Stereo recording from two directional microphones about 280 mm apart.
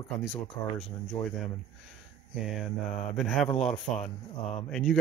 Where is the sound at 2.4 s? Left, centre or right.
Centre.